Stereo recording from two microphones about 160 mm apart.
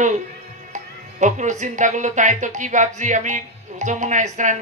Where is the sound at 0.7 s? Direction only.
50° right (ahead or behind).